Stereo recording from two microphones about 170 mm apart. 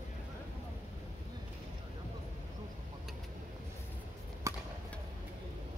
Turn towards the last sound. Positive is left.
turn(degrees=-15)  # may be behind; listen again after turning